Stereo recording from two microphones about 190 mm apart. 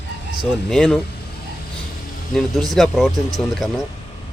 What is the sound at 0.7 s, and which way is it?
Speech, 5° left (ahead or behind).